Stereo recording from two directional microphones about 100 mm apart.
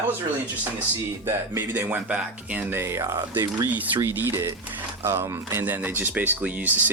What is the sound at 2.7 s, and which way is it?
Speech, 25° right (ahead or behind).